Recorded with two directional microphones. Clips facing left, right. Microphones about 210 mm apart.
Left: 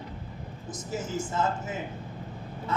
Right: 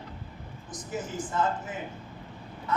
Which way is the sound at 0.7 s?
25° left (ahead or behind).